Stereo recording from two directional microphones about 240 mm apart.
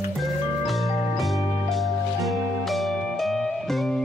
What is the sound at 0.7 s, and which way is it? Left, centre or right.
Music, centre.